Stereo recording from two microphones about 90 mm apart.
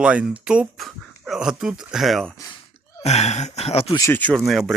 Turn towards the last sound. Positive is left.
turn(degrees=0)  # may be behind; listen again after turning